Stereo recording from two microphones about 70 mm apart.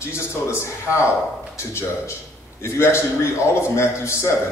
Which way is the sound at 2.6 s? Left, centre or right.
Left.